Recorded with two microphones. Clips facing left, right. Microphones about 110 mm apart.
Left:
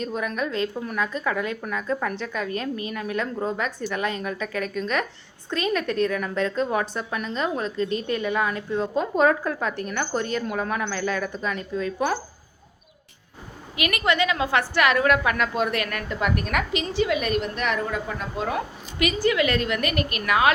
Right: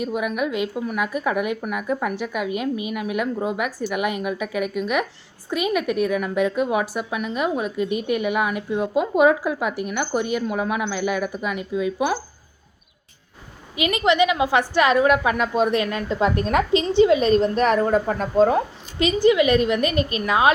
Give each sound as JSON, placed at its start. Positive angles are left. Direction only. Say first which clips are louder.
{"t": 0.0, "sound": "a woman's voice", "louder": "right 3 dB", "side_deg": -10}
{"t": 13.7, "sound": "a woman's voice", "louder": "right 5 dB", "side_deg": -20}